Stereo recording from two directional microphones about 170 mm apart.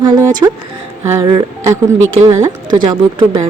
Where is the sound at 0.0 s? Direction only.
20° right (ahead or behind).